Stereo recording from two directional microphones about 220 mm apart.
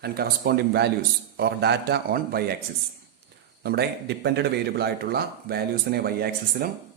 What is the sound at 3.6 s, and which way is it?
Speech, 45° right (ahead or behind).